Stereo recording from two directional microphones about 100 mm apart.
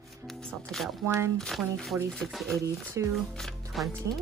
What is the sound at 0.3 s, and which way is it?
Speech, 5° left (ahead or behind).